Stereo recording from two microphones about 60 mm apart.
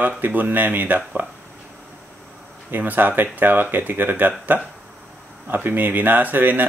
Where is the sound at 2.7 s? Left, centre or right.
Right.